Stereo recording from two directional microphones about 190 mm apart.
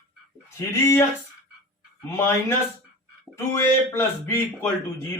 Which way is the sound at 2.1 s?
15° left (ahead or behind).